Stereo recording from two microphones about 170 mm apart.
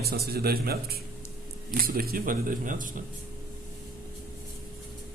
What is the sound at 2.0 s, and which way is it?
Speech, 60° right (ahead or behind).